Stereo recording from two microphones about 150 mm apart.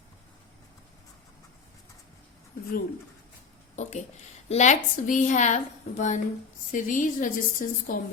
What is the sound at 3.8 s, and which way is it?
A woman's voice, 50° left (ahead or behind).